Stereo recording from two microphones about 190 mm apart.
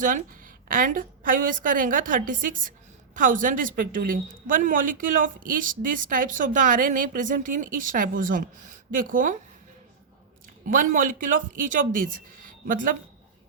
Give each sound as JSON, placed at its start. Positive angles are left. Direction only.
{"t": 0.0, "sound": "a woman's voice", "side_deg": -45}
{"t": 10.7, "sound": "a woman's voice", "side_deg": -45}